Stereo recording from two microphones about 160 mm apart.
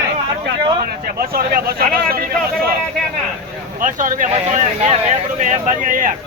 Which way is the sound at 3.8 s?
55° right (ahead or behind).